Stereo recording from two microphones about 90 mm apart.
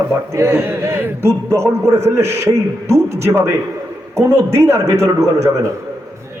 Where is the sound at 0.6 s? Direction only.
25° right (ahead or behind).